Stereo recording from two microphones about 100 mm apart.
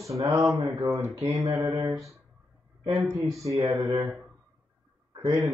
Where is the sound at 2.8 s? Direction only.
30° right (ahead or behind).